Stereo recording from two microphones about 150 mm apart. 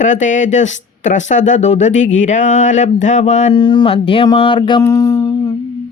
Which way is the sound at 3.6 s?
30° left (ahead or behind).